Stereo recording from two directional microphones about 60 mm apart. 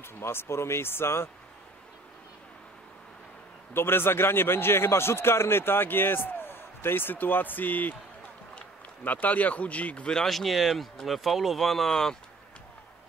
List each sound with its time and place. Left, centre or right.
0.0 s speech: left
3.7 s a man's voice: left
9.0 s speech: left
10.2 s speech: centre